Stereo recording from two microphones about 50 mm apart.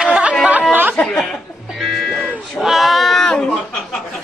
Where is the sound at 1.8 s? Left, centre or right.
Centre.